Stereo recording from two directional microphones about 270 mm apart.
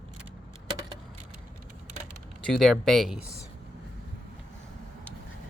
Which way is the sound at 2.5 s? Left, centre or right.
Centre.